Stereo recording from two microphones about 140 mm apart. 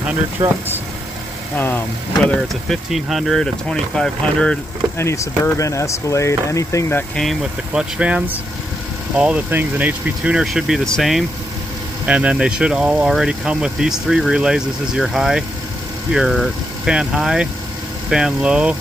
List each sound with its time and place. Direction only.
0.4 s speech: 25° right (ahead or behind)
2.4 s speech: centre (ahead or behind)
4.9 s speech: 20° left (ahead or behind)
7.2 s speech: 5° right (ahead or behind)